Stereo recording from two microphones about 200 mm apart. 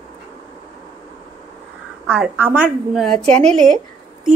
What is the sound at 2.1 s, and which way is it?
A woman's voice, 5° right (ahead or behind).